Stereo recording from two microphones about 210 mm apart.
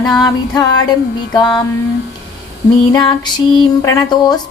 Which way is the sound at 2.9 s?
20° left (ahead or behind).